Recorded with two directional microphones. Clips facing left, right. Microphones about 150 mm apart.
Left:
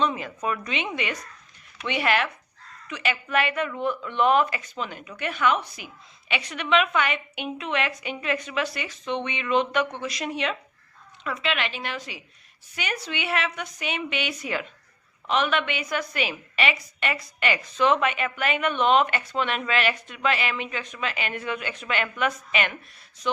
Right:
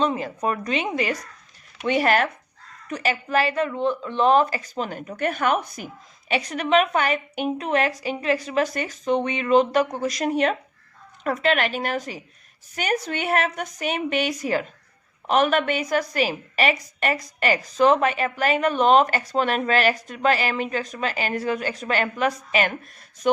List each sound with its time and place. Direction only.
0.0 s a woman's voice: 35° right (ahead or behind)
23.2 s a woman's voice: 50° right (ahead or behind)